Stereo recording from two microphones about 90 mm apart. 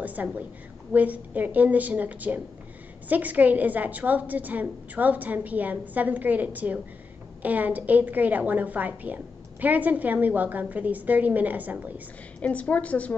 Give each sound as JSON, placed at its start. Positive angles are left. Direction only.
{"t": 0.0, "sound": "a sound", "side_deg": -15}
{"t": 0.9, "sound": "a woman's voice", "side_deg": -15}
{"t": 12.4, "sound": "a woman's voice", "side_deg": 15}